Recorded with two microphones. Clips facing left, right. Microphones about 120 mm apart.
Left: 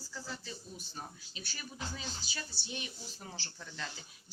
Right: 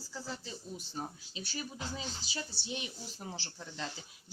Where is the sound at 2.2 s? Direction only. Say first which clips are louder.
Right 3 dB; 90° right.